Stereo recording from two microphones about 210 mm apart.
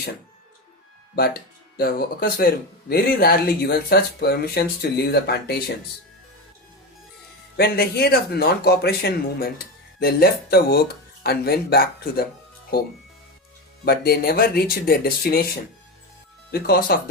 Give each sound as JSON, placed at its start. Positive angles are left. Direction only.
{"t": 1.1, "sound": "speech", "side_deg": 45}
{"t": 7.5, "sound": "speech", "side_deg": 50}
{"t": 13.8, "sound": "speech", "side_deg": 45}